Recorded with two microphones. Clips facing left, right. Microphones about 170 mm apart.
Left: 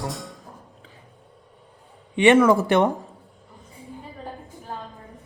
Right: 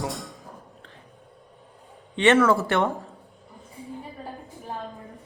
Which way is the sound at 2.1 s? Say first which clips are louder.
Left 3 dB; 15° left (ahead or behind).